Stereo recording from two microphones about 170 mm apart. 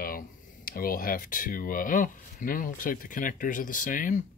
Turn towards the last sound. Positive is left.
turn(degrees=50)  # may be behind; listen again after turning